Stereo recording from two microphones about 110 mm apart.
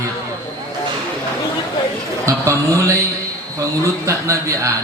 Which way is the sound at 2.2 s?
30° right (ahead or behind).